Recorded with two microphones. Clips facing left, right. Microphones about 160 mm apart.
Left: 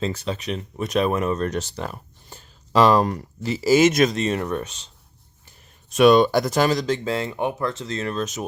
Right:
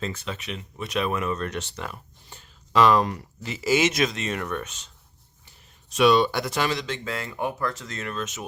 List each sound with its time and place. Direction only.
0.0 s speech: 35° left (ahead or behind)
5.9 s speech: 50° left (ahead or behind)